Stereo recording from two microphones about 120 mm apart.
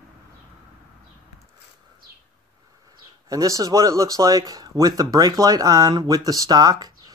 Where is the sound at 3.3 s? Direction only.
30° right (ahead or behind).